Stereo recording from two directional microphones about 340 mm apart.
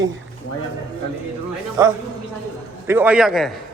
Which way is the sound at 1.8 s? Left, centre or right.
Centre.